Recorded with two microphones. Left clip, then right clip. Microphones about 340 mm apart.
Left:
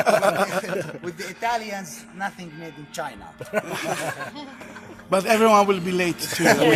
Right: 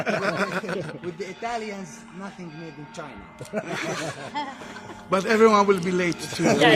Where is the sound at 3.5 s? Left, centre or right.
Left.